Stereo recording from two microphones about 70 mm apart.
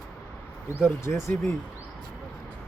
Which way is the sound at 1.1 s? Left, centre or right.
Left.